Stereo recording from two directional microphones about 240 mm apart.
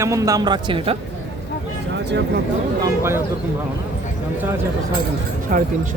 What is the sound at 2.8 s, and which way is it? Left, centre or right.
Speech, centre.